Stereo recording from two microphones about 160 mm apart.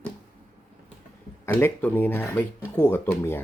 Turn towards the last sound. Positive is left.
turn(degrees=15)  # may be behind; listen again after turning